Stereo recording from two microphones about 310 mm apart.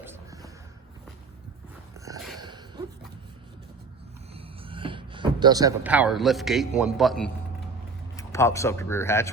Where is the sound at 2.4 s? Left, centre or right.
Centre.